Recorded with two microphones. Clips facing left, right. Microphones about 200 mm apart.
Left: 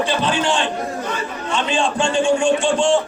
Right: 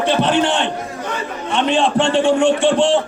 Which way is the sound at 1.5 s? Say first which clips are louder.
Right 4 dB; 60° right (ahead or behind).